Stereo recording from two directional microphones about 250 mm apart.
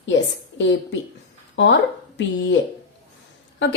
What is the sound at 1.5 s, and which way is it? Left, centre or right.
Speech, left.